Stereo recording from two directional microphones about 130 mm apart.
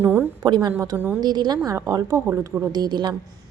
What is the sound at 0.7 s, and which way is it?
Speech, 15° right (ahead or behind).